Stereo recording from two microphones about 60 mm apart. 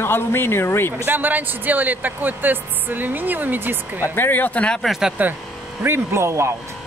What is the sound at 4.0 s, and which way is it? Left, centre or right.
Speech, left.